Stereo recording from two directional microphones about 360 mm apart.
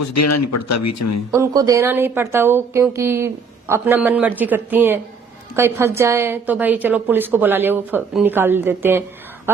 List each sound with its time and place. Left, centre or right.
0.0 s speech: left
1.3 s a woman's voice: centre